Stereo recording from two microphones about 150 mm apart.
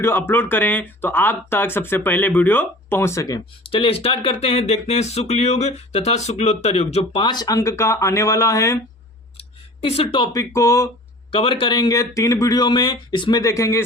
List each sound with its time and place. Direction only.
0.0 s speech: 15° left (ahead or behind)
3.7 s speech: 40° left (ahead or behind)
7.2 s speech: 30° left (ahead or behind)
9.4 s a sound: 40° left (ahead or behind)
10.3 s speech: 20° left (ahead or behind)
11.3 s speech: 40° left (ahead or behind); by 13.8 s 20° left (ahead or behind)